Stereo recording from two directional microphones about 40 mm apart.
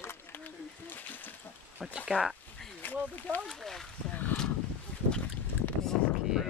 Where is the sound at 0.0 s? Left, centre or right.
Left.